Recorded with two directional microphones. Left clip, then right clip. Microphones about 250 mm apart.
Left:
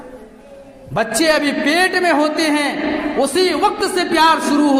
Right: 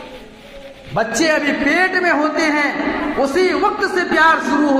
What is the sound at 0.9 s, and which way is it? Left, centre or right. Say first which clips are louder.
A man's voice: left 1 dB; left.